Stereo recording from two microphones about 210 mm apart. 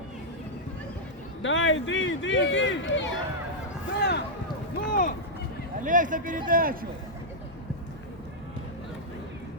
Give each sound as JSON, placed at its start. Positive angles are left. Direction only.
{"t": 1.4, "sound": "speech", "side_deg": 65}
{"t": 4.9, "sound": "speech", "side_deg": 40}
{"t": 5.8, "sound": "a man's voice", "side_deg": -40}